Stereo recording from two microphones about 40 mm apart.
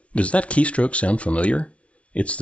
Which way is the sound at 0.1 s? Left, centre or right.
Left.